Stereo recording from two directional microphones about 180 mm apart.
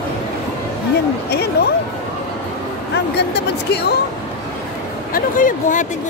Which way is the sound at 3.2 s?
65° left (ahead or behind).